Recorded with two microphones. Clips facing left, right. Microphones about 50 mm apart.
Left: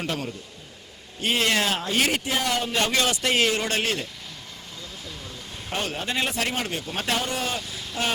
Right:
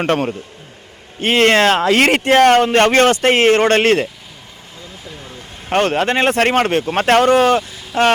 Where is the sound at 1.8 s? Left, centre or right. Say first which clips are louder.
Right 11 dB; right.